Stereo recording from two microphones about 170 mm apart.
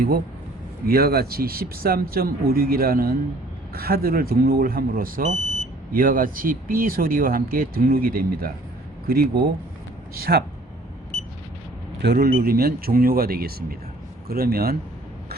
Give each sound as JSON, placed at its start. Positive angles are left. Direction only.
{"t": 0.9, "sound": "speech", "side_deg": -65}
{"t": 12.0, "sound": "speech", "side_deg": -65}